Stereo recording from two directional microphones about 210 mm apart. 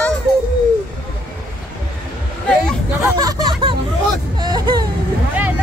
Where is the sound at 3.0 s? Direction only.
15° right (ahead or behind).